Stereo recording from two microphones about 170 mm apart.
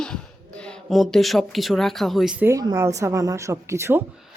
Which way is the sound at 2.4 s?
15° right (ahead or behind).